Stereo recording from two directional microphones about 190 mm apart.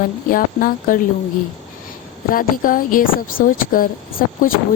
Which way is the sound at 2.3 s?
45° left (ahead or behind).